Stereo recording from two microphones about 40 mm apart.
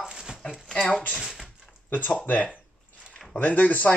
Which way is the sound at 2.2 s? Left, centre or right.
Left.